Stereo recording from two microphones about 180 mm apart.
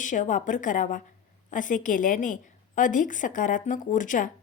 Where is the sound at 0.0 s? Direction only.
45° left (ahead or behind).